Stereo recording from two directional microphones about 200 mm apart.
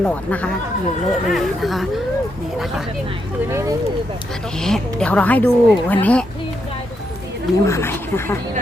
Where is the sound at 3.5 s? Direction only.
15° right (ahead or behind).